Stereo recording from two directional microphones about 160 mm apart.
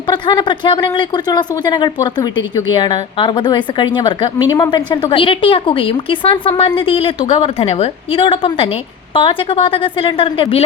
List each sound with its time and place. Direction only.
0.1 s a woman's voice: 30° left (ahead or behind)